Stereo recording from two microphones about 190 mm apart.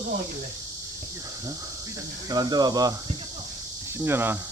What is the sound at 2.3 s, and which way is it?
Speech, 20° right (ahead or behind).